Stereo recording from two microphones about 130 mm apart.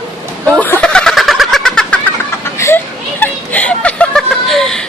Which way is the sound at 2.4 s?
20° left (ahead or behind).